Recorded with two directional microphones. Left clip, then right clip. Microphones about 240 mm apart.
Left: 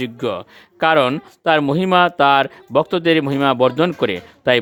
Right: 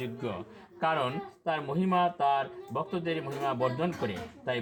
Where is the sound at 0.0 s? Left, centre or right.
Left.